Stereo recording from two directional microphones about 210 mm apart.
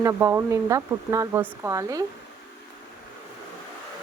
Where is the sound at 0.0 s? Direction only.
15° right (ahead or behind).